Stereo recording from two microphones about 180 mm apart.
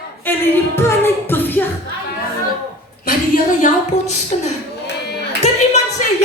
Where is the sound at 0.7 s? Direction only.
10° left (ahead or behind).